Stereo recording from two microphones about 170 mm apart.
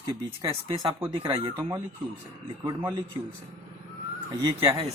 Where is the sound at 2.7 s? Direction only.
25° right (ahead or behind).